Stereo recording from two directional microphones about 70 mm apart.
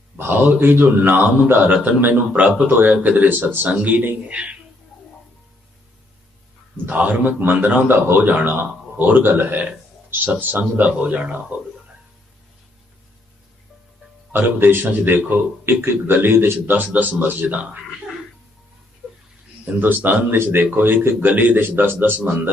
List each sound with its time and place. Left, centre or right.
0.2 s a man's voice: right
6.8 s a man's voice: right
14.3 s a man's voice: right
19.8 s a man's voice: right
21.9 s a man's voice: centre